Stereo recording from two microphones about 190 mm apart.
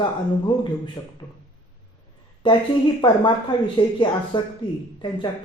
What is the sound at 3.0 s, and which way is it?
Speech, 25° left (ahead or behind).